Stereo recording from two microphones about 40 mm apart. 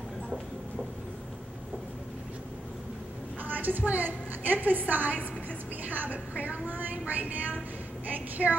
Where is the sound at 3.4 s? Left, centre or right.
Right.